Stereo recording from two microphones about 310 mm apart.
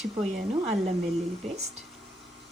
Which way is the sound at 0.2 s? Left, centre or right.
Centre.